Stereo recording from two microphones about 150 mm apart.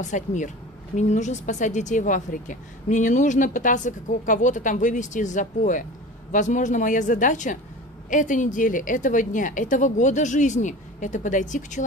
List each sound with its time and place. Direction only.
0.0 s speech: 55° left (ahead or behind)